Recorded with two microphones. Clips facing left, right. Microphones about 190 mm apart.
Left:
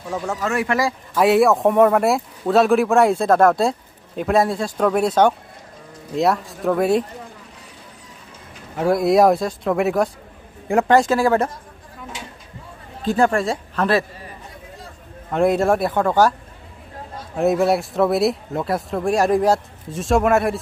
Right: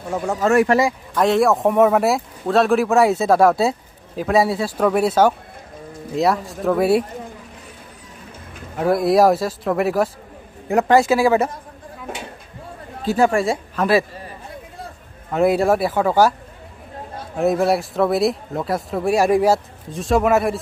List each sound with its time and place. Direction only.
0.5 s speech: 45° right (ahead or behind)
1.1 s speech: 5° left (ahead or behind)
8.7 s speech: centre (ahead or behind)
13.0 s speech: 5° right (ahead or behind)
15.3 s speech: 5° right (ahead or behind)
17.4 s speech: centre (ahead or behind)